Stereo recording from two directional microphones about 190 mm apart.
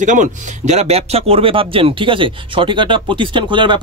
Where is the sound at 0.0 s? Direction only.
40° right (ahead or behind).